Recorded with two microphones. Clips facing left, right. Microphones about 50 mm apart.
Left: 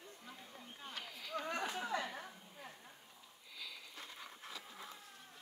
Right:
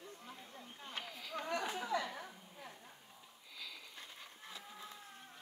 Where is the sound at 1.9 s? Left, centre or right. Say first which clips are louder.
Right 3 dB; left.